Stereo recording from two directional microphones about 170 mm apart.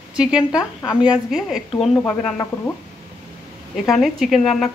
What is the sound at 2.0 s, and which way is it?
Speech, 10° left (ahead or behind).